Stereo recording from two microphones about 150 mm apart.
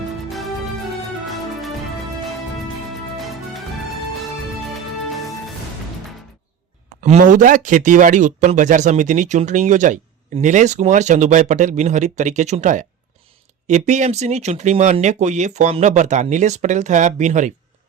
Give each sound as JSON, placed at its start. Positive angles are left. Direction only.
{"t": 3.2, "sound": "music", "side_deg": 0}
{"t": 4.7, "sound": "music", "side_deg": 0}
{"t": 7.0, "sound": "speech", "side_deg": -55}